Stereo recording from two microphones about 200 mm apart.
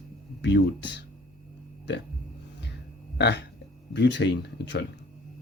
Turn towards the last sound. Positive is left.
turn(degrees=55)  # may be behind; listen again after turning